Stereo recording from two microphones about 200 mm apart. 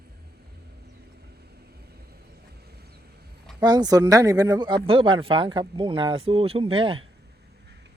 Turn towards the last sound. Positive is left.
turn(degrees=-55)  # may be behind; listen again after turning